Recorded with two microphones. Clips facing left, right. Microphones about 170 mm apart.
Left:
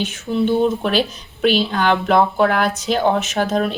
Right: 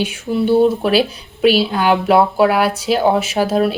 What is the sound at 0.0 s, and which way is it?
A woman's voice, 10° right (ahead or behind).